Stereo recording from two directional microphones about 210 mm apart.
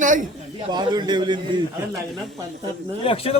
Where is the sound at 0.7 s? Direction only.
20° right (ahead or behind).